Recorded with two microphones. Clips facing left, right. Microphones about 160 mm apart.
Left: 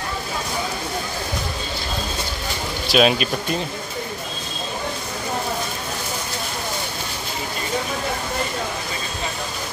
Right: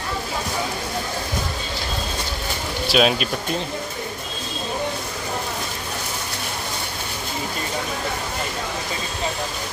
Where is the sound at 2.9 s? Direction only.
Centre (ahead or behind).